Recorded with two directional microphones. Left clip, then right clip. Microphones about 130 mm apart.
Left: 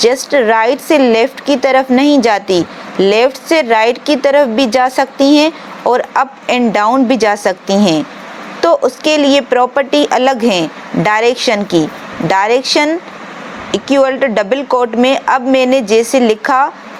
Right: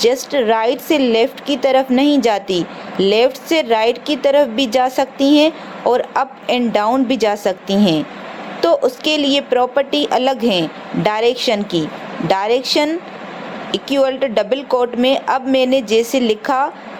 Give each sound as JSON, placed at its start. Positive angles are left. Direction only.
{"t": 0.0, "sound": "a woman's voice", "side_deg": 30}